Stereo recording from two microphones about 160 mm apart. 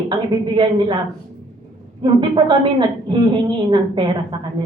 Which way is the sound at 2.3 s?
30° right (ahead or behind).